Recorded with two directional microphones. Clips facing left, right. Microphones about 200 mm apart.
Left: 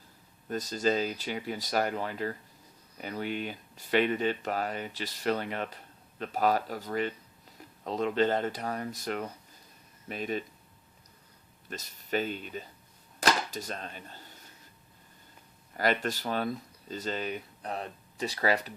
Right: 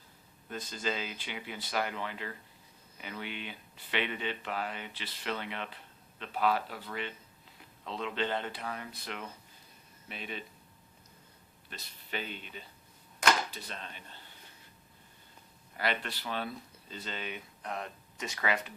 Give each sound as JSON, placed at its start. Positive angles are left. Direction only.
{"t": 0.4, "sound": "speech", "side_deg": 40}
{"t": 11.7, "sound": "speech", "side_deg": 45}
{"t": 13.1, "sound": "arrow", "side_deg": 40}
{"t": 15.8, "sound": "speech", "side_deg": 45}